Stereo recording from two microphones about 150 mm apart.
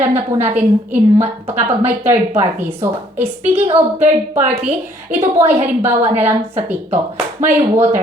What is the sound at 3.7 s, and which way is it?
Speech, 50° right (ahead or behind).